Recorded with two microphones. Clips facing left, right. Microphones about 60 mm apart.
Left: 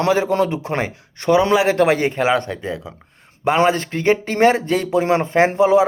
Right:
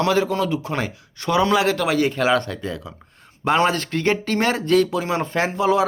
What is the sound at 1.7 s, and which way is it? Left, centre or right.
Speech, left.